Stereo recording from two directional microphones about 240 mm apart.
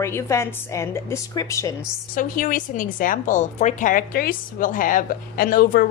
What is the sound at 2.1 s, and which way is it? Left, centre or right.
A woman's voice, left.